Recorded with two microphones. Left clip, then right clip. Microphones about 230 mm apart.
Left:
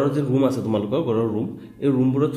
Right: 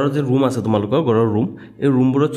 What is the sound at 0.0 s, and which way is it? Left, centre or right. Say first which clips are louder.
A man's voice: right 3 dB; right.